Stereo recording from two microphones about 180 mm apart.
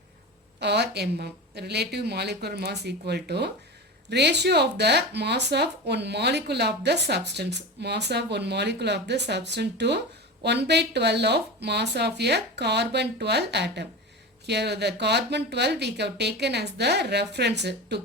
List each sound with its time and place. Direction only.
0.6 s speech: 70° right (ahead or behind)